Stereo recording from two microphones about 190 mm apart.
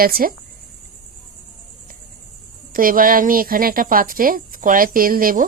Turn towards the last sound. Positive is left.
turn(degrees=-50)  # may be behind; listen again after turning